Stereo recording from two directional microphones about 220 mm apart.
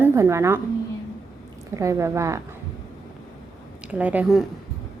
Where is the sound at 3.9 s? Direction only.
5° right (ahead or behind).